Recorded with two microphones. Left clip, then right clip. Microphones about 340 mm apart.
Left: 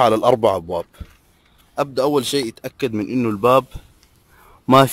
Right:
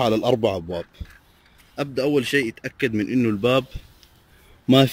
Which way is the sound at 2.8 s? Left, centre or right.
Centre.